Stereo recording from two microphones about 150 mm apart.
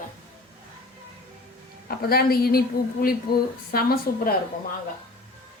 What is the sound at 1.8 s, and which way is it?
A woman's voice, 90° left.